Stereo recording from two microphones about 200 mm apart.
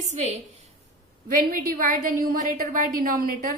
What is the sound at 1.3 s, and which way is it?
A woman's voice, 45° right (ahead or behind).